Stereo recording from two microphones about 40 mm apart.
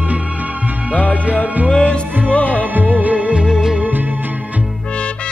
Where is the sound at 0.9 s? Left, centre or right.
Left.